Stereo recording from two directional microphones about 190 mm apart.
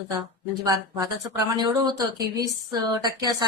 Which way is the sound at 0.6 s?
20° right (ahead or behind).